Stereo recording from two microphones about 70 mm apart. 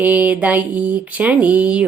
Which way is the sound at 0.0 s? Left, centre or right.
Right.